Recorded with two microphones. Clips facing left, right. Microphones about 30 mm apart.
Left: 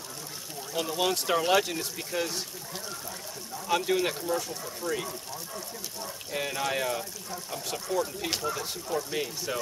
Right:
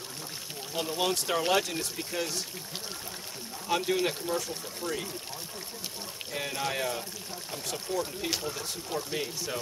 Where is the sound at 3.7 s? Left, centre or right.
Centre.